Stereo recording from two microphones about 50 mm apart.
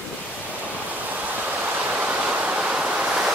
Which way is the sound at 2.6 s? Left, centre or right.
Centre.